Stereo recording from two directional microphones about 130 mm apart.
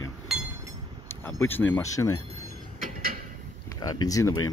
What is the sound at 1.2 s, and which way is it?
Speech, 15° left (ahead or behind).